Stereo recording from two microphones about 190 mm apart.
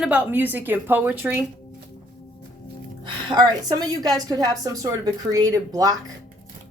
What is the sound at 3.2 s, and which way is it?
A woman's voice, 20° right (ahead or behind).